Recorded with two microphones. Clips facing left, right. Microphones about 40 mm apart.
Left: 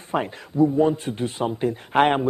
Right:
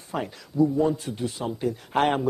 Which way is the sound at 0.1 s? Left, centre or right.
Left.